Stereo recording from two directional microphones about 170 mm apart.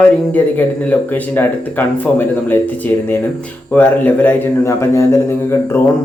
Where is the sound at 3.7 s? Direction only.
10° left (ahead or behind).